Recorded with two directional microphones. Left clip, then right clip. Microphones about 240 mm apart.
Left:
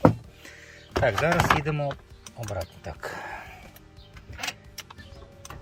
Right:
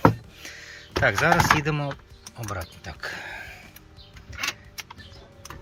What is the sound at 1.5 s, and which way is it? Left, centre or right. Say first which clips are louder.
Speech: right 1 dB; centre.